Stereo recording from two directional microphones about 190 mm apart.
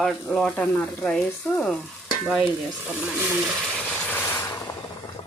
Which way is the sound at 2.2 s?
5° right (ahead or behind).